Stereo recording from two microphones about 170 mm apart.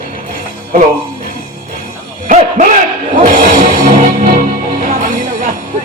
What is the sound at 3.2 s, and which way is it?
Music, 50° right (ahead or behind).